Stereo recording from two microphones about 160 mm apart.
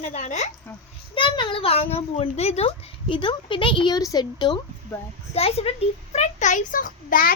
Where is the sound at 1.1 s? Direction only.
30° left (ahead or behind).